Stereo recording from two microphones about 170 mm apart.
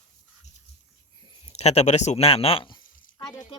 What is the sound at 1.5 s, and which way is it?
A woman's voice, 40° left (ahead or behind).